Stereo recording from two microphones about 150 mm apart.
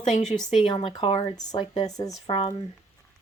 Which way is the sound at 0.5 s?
35° left (ahead or behind).